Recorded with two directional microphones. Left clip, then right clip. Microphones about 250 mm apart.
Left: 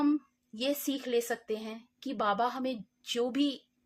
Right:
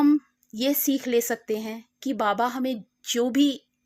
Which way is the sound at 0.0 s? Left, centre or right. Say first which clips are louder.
Right 9 dB; right.